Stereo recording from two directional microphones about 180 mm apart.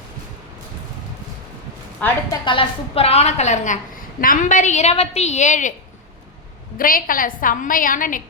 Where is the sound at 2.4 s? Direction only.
30° left (ahead or behind); by 5.7 s 45° left (ahead or behind).